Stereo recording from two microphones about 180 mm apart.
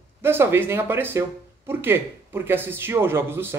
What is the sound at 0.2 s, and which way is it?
A man's voice, 15° right (ahead or behind).